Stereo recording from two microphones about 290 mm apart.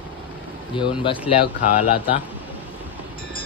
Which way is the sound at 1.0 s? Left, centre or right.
Centre.